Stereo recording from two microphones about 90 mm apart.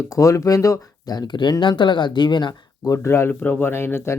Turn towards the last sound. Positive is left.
turn(degrees=25)  # may be behind; listen again after turning